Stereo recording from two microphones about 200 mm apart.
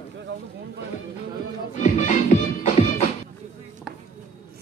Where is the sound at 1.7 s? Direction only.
35° left (ahead or behind).